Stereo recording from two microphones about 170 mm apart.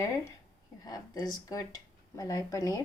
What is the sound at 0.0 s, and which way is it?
A woman's voice, 20° left (ahead or behind).